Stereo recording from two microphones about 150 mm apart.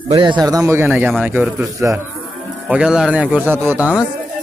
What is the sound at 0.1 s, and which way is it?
A man's voice, 30° right (ahead or behind).